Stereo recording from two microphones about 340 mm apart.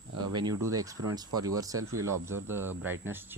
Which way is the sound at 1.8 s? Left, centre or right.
Right.